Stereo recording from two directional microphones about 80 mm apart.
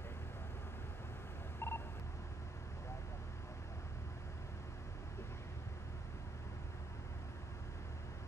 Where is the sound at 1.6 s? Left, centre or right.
Left.